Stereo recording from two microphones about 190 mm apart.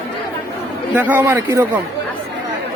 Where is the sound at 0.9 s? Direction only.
10° right (ahead or behind).